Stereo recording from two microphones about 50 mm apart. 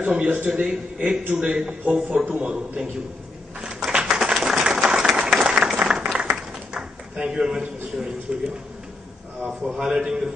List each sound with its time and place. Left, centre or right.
0.0 s a man's voice: right
3.6 s applause: centre
6.2 s a sound: centre
8.0 s speech: centre
9.8 s a man's voice: centre